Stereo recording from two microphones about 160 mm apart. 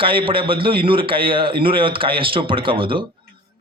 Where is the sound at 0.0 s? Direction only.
35° right (ahead or behind).